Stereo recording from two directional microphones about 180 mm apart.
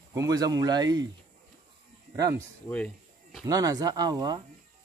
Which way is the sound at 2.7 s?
5° left (ahead or behind).